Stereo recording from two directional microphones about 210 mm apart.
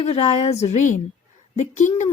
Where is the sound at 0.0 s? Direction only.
30° left (ahead or behind).